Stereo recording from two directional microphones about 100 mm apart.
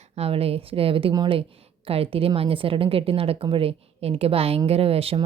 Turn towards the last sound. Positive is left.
turn(degrees=-75)  # may be behind; listen again after turning